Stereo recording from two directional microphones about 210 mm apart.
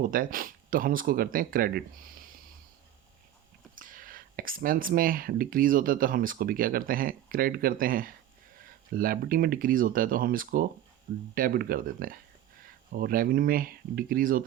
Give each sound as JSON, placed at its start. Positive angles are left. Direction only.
{"t": 0.0, "sound": "speech", "side_deg": -40}
{"t": 3.8, "sound": "speech", "side_deg": -40}